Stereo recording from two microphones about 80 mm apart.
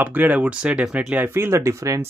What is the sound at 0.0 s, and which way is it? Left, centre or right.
Speech, right.